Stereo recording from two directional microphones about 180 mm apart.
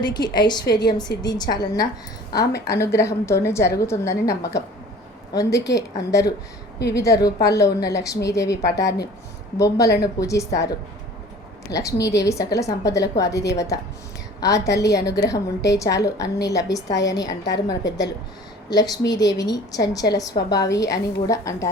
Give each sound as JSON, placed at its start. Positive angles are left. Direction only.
{"t": 0.0, "sound": "a woman's voice", "side_deg": 25}
{"t": 2.6, "sound": "a woman's voice", "side_deg": 15}